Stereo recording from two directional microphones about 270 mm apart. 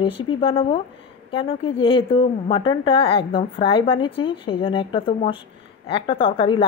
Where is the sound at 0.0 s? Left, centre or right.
Centre.